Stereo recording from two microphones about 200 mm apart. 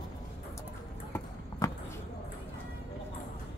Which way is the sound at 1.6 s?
15° left (ahead or behind).